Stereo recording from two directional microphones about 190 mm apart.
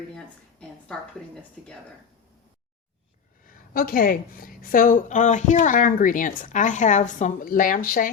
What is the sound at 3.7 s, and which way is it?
A woman's voice, 50° left (ahead or behind).